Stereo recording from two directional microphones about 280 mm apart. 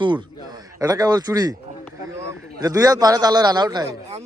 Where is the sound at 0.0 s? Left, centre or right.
Centre.